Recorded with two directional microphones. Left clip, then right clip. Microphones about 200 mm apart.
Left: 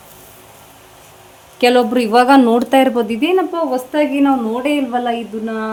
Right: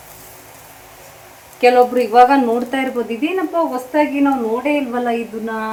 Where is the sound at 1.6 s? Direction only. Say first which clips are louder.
Right 1 dB; 60° left (ahead or behind).